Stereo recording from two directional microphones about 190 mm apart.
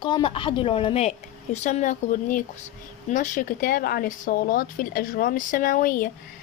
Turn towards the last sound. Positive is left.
turn(degrees=50)  # may be behind; listen again after turning